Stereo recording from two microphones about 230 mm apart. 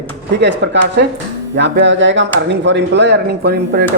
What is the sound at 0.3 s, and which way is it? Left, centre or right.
Speech, right.